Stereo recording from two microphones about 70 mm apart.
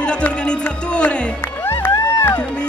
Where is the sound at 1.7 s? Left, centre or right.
Left.